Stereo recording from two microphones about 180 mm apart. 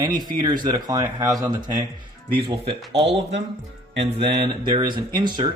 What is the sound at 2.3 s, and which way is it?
Speech, 30° right (ahead or behind).